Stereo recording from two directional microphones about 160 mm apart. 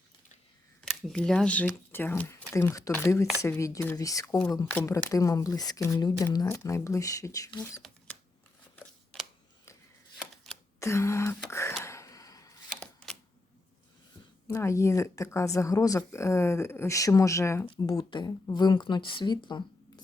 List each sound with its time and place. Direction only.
0.9 s speech: 5° left (ahead or behind); by 7.8 s 20° left (ahead or behind)
10.8 s a sound: 15° left (ahead or behind)
14.4 s speech: 20° left (ahead or behind)
17.7 s speech: 30° left (ahead or behind)